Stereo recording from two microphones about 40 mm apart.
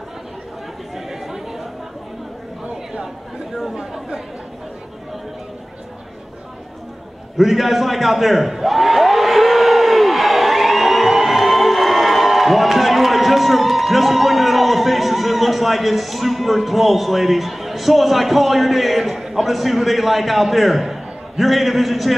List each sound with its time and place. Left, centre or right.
0.9 s chatter: centre
2.6 s chatter: centre
3.7 s speech: centre
7.3 s a sound: centre